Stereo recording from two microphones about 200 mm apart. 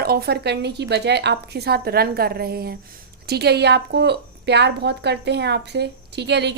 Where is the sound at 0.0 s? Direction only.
50° right (ahead or behind).